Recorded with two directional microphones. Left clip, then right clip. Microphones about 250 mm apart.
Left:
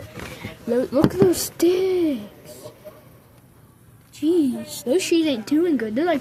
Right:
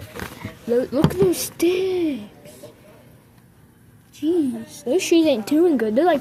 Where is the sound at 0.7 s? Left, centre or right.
Centre.